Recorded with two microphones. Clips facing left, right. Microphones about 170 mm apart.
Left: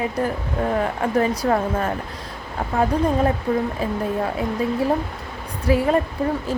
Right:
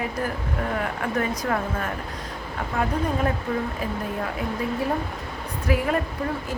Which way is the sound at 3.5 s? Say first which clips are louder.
Left 5 dB; 35° left (ahead or behind).